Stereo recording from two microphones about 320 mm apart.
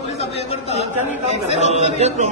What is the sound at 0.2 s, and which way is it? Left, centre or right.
Speech, centre.